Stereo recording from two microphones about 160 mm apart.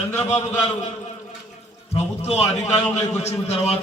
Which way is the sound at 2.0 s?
40° left (ahead or behind).